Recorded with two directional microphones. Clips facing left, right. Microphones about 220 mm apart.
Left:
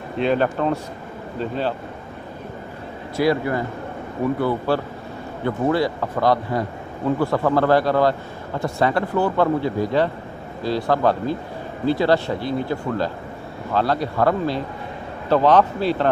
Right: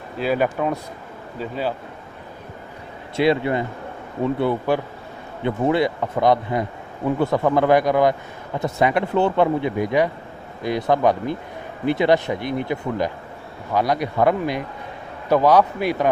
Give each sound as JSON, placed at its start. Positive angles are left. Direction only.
{"t": 0.2, "sound": "a man's voice", "side_deg": -10}
{"t": 3.2, "sound": "a man's voice", "side_deg": -25}